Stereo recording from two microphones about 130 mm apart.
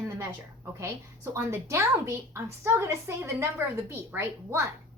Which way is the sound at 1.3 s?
20° right (ahead or behind).